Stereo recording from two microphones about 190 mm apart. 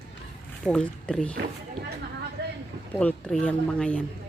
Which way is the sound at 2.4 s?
60° right (ahead or behind).